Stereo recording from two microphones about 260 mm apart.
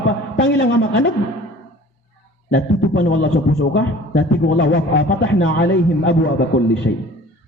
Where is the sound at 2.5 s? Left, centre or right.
Left.